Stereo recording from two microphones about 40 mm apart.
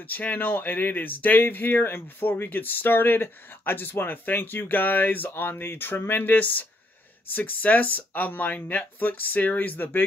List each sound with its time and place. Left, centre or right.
0.1 s speech: left
5.3 s speech: left
6.3 s speech: left